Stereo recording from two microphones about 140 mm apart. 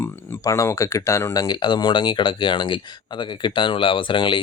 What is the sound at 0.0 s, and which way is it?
Speech, 20° left (ahead or behind).